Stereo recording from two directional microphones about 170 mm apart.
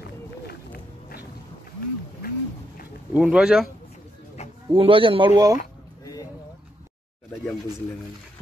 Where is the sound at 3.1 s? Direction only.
5° right (ahead or behind).